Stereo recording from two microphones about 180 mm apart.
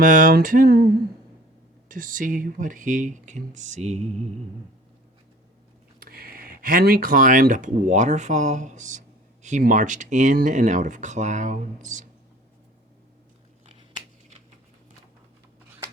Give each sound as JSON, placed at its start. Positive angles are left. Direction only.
{"t": 0.0, "sound": "speech", "side_deg": -50}
{"t": 1.9, "sound": "speech", "side_deg": -50}
{"t": 6.0, "sound": "speech", "side_deg": -55}
{"t": 13.7, "sound": "scissors", "side_deg": -25}